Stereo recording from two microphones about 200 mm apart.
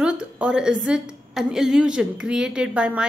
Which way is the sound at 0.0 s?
5° right (ahead or behind).